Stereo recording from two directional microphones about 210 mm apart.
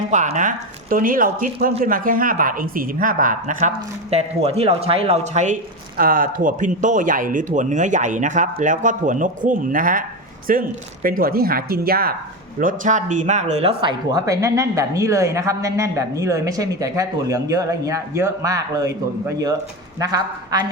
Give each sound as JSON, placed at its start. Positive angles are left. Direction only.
{"t": 0.1, "sound": "speech", "side_deg": -35}
{"t": 20.0, "sound": "speech", "side_deg": -20}